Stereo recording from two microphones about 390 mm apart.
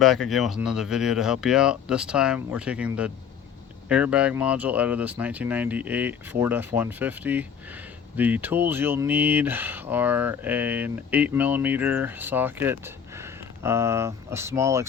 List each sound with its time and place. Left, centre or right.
0.0 s speech: centre